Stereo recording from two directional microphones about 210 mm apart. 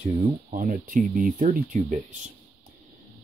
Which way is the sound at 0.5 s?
40° right (ahead or behind).